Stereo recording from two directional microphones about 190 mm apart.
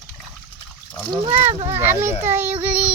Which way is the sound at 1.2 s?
25° right (ahead or behind).